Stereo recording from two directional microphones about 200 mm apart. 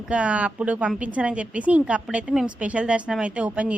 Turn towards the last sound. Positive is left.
turn(degrees=-5)  # may be behind; listen again after turning